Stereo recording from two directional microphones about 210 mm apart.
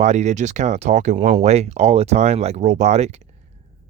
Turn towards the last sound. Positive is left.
turn(degrees=-30)  # may be behind; listen again after turning